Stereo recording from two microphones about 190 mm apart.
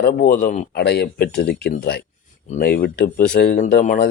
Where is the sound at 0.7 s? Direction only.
60° left (ahead or behind).